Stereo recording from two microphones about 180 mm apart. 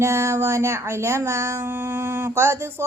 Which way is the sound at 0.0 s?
15° right (ahead or behind).